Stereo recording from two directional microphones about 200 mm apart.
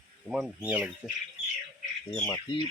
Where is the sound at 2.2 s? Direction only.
20° left (ahead or behind).